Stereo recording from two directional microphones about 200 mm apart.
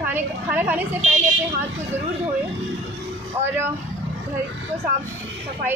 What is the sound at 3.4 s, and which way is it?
Speech, 10° right (ahead or behind).